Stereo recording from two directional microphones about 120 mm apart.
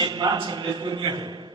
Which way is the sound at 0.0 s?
35° right (ahead or behind).